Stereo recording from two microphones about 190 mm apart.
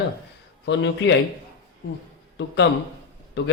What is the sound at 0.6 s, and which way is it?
Speech, 75° left (ahead or behind).